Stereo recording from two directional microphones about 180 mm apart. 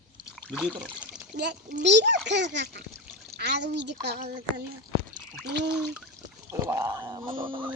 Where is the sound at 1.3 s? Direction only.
70° right (ahead or behind).